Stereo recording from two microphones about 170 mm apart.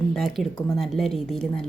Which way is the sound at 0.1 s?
Centre (ahead or behind).